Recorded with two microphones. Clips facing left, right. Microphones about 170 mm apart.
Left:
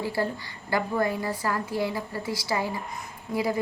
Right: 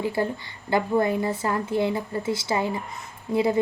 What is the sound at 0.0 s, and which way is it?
A woman's voice, 20° right (ahead or behind).